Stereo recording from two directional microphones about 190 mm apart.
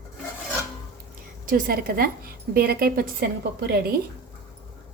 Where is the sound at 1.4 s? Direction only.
50° right (ahead or behind).